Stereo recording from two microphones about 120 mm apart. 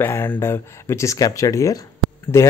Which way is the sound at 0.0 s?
20° left (ahead or behind).